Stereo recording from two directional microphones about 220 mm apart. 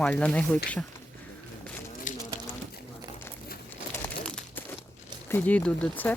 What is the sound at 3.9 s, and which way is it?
Crumpling, 5° left (ahead or behind).